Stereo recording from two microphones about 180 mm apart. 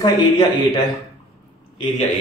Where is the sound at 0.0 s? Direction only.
20° left (ahead or behind).